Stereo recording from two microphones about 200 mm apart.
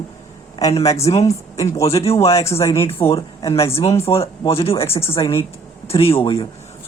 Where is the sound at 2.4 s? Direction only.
15° left (ahead or behind).